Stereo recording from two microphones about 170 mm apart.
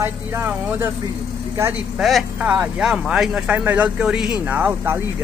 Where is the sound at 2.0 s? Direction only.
Centre (ahead or behind).